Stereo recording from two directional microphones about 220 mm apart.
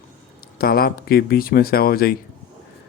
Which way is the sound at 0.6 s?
45° left (ahead or behind).